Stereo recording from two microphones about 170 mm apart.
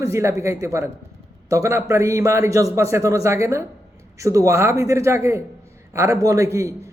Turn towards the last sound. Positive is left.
turn(degrees=-20)  # may be behind; listen again after turning